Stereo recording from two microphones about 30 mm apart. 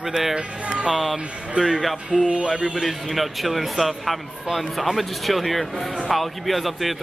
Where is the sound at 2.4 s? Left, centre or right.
Right.